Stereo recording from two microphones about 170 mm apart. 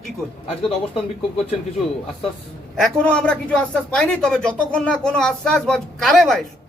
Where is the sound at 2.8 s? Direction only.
5° left (ahead or behind).